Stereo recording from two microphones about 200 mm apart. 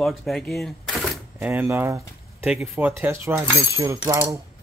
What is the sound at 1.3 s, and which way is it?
Speech, 10° right (ahead or behind).